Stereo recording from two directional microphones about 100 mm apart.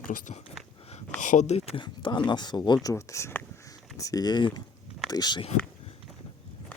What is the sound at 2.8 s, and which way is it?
Speech, 30° left (ahead or behind).